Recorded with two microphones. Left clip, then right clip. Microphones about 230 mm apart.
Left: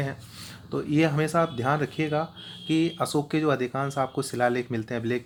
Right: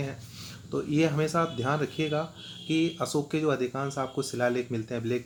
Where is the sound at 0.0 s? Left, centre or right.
Left.